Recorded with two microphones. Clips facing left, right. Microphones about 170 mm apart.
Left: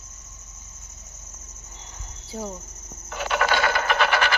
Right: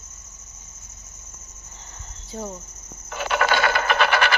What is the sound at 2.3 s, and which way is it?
Speech, 10° left (ahead or behind).